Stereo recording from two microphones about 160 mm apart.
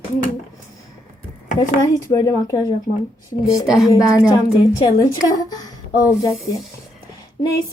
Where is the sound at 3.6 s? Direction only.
Centre (ahead or behind).